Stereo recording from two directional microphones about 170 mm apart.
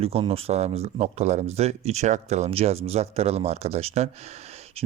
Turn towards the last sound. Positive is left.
turn(degrees=-40)  # may be behind; listen again after turning